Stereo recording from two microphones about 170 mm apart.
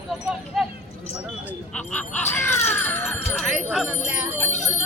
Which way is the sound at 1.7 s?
5° left (ahead or behind).